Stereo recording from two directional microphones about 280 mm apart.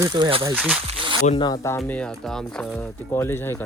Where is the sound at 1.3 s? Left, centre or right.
Centre.